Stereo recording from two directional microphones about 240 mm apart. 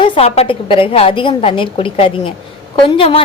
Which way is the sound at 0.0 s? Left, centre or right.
Left.